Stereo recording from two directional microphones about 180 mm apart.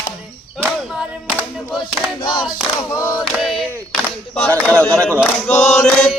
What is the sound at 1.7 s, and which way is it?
Chant, centre (ahead or behind).